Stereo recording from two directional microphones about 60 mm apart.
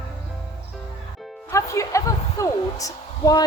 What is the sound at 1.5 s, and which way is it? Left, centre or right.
A woman's voice, left.